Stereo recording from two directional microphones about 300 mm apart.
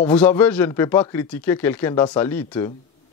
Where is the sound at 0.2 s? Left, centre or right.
Centre.